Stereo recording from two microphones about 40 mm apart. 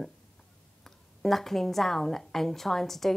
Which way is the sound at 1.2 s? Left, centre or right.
Centre.